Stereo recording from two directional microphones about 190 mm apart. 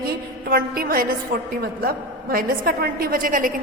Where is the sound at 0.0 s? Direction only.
55° right (ahead or behind).